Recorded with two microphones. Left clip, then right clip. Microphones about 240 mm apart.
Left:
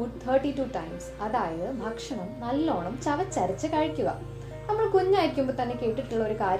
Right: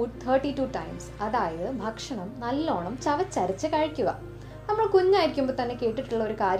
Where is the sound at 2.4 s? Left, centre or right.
Right.